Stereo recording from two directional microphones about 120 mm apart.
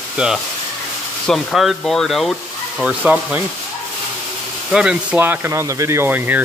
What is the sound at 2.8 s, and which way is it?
Speech, 10° right (ahead or behind).